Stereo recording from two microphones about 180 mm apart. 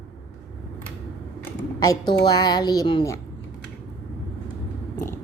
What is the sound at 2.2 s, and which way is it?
A woman's voice, 20° left (ahead or behind).